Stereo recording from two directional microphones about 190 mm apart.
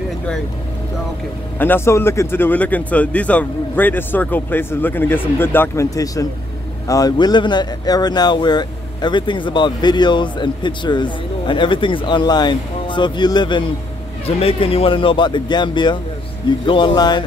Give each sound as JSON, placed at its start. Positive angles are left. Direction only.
{"t": 1.6, "sound": "speech", "side_deg": 10}